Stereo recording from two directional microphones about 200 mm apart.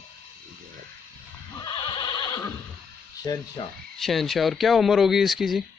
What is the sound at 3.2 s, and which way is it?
Speech, 20° left (ahead or behind).